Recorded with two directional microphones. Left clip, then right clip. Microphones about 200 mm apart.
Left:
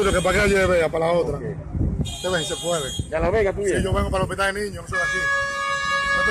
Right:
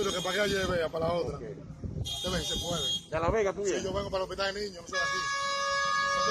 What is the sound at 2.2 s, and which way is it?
Speech, 35° left (ahead or behind).